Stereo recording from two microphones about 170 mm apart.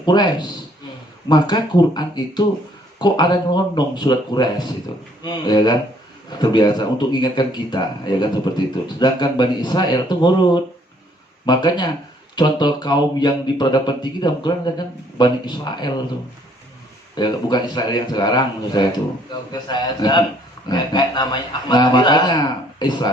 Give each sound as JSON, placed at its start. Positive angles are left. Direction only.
{"t": 0.0, "sound": "speech", "side_deg": 25}
{"t": 17.2, "sound": "speech", "side_deg": 25}